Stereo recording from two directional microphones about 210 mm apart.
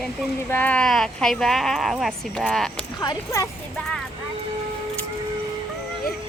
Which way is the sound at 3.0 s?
15° left (ahead or behind).